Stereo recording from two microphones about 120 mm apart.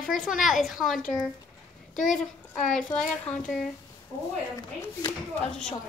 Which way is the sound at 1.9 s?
90° left.